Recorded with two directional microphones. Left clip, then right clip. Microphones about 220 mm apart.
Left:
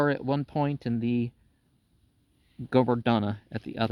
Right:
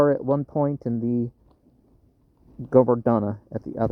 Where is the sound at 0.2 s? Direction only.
45° left (ahead or behind).